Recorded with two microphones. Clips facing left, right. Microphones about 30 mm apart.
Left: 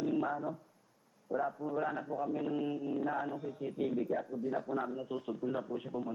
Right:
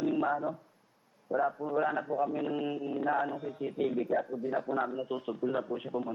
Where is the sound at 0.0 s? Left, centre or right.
Right.